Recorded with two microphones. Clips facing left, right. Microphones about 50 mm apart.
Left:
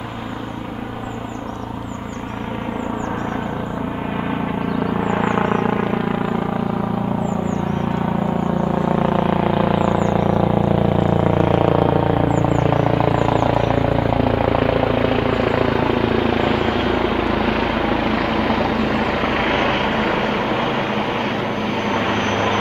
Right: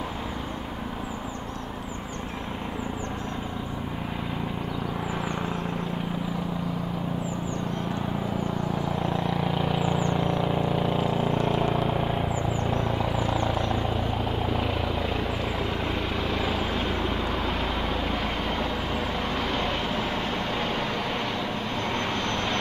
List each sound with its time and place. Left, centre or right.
5.0 s vehicle: left
8.8 s a sound: left
11.3 s vehicle: left